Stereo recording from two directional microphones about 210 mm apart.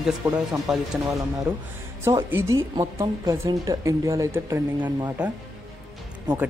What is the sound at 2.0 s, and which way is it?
Speech, 15° right (ahead or behind).